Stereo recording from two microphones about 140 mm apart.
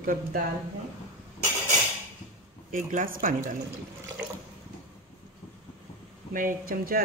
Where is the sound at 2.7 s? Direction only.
70° right (ahead or behind).